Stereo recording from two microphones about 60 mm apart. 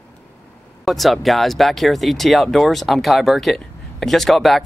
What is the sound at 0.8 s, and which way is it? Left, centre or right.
Speech, centre.